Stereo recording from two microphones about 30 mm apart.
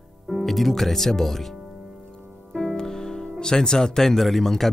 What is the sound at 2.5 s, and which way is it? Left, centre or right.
Music, centre.